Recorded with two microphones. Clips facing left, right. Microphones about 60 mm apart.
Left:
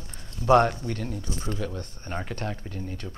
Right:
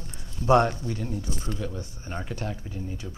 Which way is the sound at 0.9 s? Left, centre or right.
Left.